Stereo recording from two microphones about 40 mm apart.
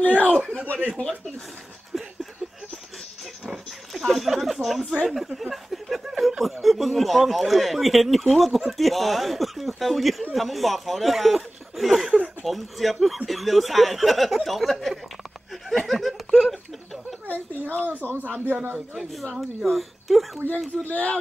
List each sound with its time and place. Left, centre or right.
0.0 s a sound: left
3.9 s speech: centre
15.7 s laughter: centre
17.3 s a sound: left
17.7 s a woman's voice: right
19.3 s speech: centre
20.4 s speech: left